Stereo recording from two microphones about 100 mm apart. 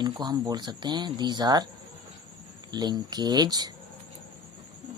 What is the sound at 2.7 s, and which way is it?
Speech, 45° right (ahead or behind).